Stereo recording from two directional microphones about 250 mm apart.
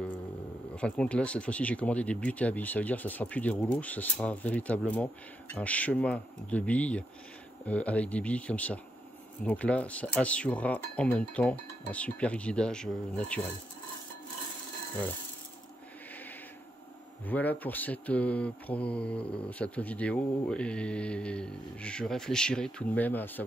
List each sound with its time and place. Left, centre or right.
0.7 s speech: centre
17.3 s speech: centre